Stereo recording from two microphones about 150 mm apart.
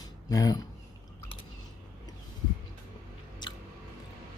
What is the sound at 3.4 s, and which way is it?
Chewing, 30° left (ahead or behind).